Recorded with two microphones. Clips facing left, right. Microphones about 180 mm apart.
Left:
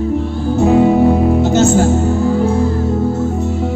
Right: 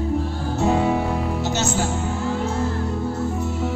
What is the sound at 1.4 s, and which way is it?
Music, 50° left (ahead or behind).